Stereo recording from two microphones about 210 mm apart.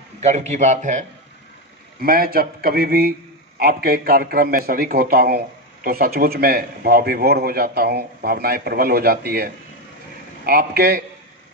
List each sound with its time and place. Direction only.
0.2 s a man's voice: 30° right (ahead or behind)